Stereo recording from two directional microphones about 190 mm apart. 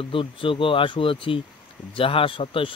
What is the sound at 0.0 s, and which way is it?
Speech, 25° left (ahead or behind).